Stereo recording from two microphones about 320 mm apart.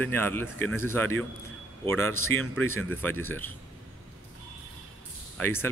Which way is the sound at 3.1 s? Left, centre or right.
Right.